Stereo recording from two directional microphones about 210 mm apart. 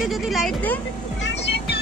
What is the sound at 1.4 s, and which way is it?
Vehicle, 55° left (ahead or behind).